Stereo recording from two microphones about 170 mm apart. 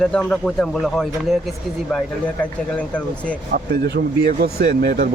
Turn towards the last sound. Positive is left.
turn(degrees=-70)  # may be behind; listen again after turning